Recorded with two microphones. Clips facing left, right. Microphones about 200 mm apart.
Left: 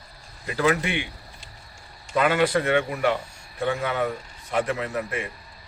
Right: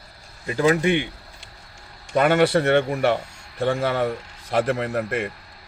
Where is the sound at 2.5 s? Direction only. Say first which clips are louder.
Right 4 dB; 40° right (ahead or behind).